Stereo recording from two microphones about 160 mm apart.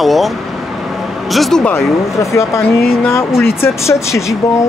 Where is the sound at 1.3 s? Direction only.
Centre (ahead or behind).